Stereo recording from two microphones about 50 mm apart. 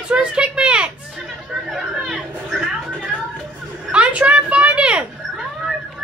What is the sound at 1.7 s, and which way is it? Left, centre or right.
Chatter, centre.